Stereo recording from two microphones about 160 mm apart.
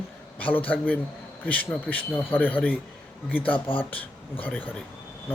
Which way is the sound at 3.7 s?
35° left (ahead or behind).